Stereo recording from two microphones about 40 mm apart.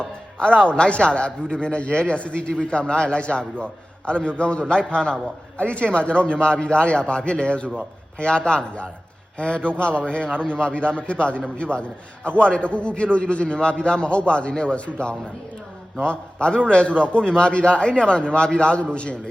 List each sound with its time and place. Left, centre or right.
0.0 s a man's voice: left